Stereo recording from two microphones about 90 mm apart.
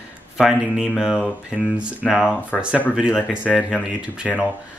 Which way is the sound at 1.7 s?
10° right (ahead or behind).